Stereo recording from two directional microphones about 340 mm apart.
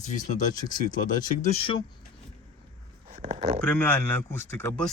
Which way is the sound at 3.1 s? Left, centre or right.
Centre.